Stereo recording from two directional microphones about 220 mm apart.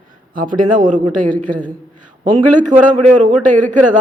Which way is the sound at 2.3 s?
35° right (ahead or behind).